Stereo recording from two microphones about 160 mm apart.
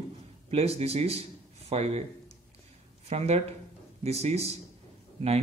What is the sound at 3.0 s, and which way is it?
A man's voice, 40° right (ahead or behind).